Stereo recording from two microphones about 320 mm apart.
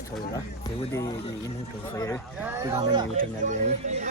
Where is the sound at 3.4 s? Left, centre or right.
Right.